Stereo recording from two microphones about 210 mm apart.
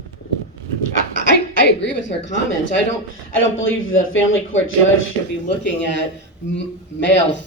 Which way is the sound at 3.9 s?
70° left (ahead or behind).